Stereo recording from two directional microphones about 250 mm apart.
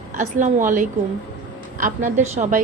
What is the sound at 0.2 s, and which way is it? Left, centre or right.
A woman's voice, right.